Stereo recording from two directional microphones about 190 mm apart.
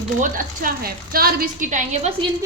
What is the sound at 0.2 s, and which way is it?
A woman's voice, 45° right (ahead or behind).